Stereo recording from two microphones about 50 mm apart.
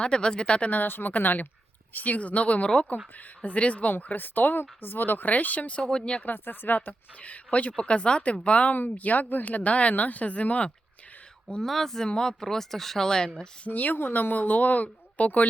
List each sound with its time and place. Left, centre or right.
0.0 s speech: centre
0.7 s speech: left; by 6.2 s centre
6.2 s speech: left
11.6 s speech: centre
12.0 s speech: centre
13.7 s speech: left